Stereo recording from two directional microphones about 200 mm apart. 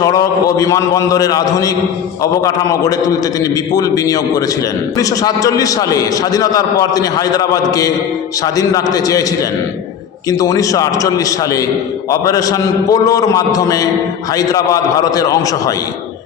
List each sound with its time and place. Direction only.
0.0 s a man's voice: 20° left (ahead or behind)